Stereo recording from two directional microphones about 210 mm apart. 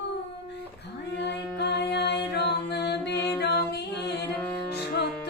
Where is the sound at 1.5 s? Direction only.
50° left (ahead or behind).